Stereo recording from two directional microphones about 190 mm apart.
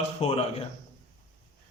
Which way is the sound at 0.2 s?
35° left (ahead or behind).